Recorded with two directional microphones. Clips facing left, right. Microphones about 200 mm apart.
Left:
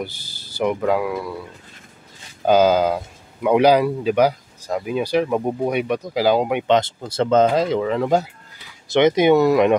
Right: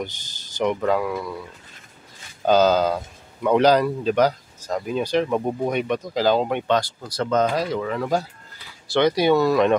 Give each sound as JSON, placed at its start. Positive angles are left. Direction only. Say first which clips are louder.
{"t": 0.0, "sound": "speech", "louder": "left 1 dB", "side_deg": 10}
{"t": 2.4, "sound": "speech", "louder": "left 2 dB", "side_deg": 10}
{"t": 6.8, "sound": "speech", "louder": "left 5 dB", "side_deg": 25}